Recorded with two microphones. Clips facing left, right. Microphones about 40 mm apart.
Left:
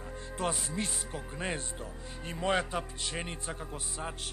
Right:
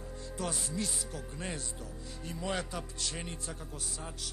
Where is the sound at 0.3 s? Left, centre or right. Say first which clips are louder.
Left 3 dB; left.